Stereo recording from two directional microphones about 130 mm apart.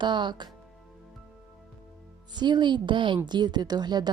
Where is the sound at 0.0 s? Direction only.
35° right (ahead or behind).